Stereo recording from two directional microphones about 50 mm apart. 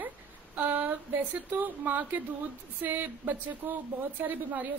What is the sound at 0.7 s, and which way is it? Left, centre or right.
A woman's voice, right.